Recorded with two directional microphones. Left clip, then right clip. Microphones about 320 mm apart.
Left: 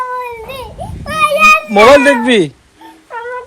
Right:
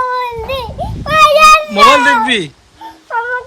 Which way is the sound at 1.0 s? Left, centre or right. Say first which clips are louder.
Right 3 dB; centre.